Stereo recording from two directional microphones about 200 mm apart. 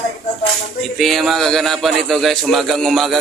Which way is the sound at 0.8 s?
Centre (ahead or behind).